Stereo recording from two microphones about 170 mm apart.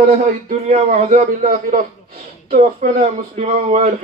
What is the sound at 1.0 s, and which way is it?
A man's voice, 60° right (ahead or behind).